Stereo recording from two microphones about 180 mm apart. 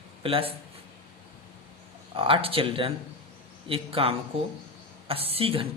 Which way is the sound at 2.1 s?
30° right (ahead or behind).